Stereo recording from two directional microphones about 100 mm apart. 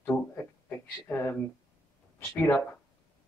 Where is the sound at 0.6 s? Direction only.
20° left (ahead or behind).